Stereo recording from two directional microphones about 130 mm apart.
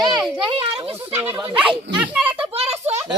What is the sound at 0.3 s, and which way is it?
Speech, 40° right (ahead or behind).